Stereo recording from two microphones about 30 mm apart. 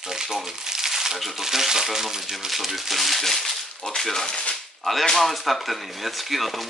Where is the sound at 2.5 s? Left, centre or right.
Centre.